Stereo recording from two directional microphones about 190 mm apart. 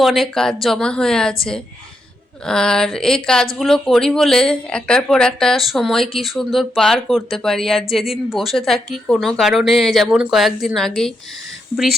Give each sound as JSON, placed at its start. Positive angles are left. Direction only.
{"t": 0.0, "sound": "speech", "side_deg": 0}